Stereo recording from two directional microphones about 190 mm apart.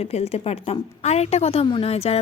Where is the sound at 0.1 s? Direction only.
30° left (ahead or behind).